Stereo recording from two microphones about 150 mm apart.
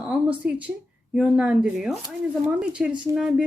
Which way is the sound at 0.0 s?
10° right (ahead or behind).